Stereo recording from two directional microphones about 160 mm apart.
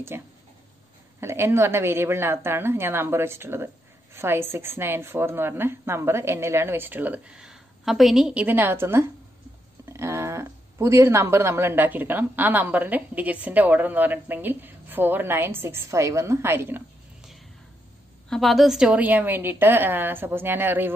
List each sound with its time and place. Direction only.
0.1 s speech: 15° right (ahead or behind)
18.3 s speech: centre (ahead or behind)